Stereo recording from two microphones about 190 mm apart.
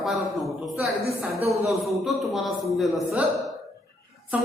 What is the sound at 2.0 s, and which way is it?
A woman's voice, centre (ahead or behind).